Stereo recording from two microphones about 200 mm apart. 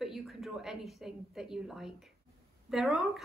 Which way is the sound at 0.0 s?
Centre (ahead or behind).